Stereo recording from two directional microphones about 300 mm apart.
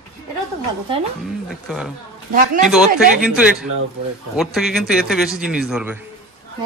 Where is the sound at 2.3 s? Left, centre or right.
Right.